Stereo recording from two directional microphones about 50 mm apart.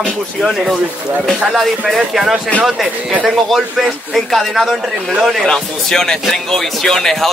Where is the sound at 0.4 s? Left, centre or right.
Centre.